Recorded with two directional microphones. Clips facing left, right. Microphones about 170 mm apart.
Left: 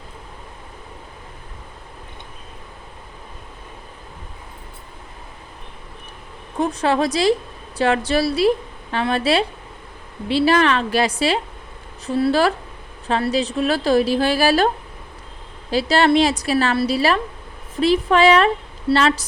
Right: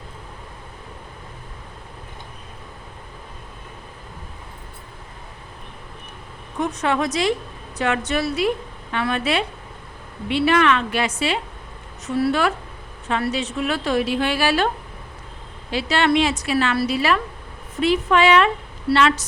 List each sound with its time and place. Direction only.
6.6 s a woman's voice: 30° left (ahead or behind)
15.7 s a woman's voice: 35° left (ahead or behind)